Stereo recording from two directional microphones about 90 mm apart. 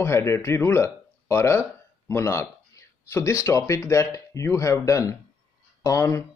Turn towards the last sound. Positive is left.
turn(degrees=35)  # may be behind; listen again after turning